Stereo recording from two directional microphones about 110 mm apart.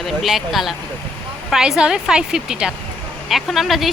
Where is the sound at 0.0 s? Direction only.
Centre (ahead or behind).